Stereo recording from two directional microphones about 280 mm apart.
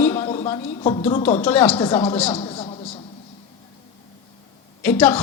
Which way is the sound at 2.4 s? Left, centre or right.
Centre.